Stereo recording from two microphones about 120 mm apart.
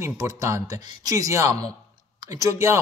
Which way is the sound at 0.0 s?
25° right (ahead or behind).